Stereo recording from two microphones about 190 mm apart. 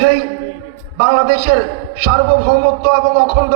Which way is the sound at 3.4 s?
90° right.